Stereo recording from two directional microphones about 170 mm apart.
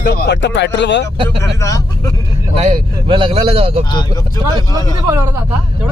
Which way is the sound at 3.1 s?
30° right (ahead or behind).